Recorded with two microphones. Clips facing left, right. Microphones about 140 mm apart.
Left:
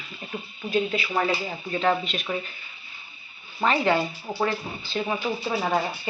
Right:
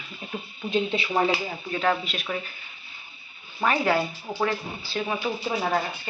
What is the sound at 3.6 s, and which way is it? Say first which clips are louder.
Speech: left 1 dB; 5° right (ahead or behind).